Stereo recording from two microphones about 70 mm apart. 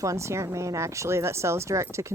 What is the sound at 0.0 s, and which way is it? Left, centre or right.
Speech, right.